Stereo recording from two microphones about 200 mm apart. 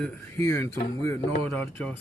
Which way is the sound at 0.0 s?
10° left (ahead or behind).